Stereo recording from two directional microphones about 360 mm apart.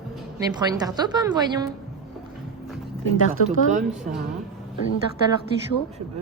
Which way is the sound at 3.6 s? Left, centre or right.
Right.